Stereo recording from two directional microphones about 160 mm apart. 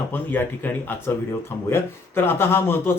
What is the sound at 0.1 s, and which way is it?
Speech, 10° left (ahead or behind).